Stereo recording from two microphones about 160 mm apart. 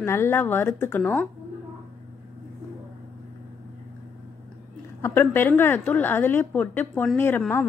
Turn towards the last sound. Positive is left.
turn(degrees=10)  # may be behind; listen again after turning